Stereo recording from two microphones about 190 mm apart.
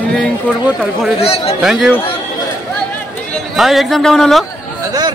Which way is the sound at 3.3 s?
Centre (ahead or behind).